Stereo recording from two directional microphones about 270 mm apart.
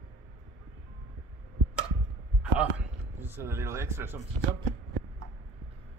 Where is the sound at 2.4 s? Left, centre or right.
Centre.